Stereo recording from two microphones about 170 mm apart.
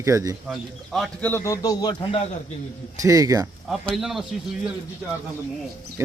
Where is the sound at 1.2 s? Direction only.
15° left (ahead or behind).